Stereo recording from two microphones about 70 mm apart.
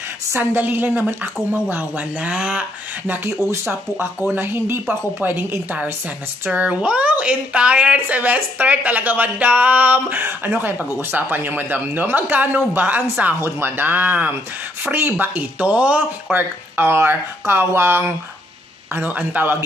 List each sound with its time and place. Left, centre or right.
0.4 s a woman's voice: right
2.1 s speech: centre
4.0 s a woman's voice: right
16.3 s speech: right
18.9 s a woman's voice: right